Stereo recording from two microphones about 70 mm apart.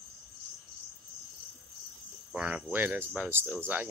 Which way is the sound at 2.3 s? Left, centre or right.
Centre.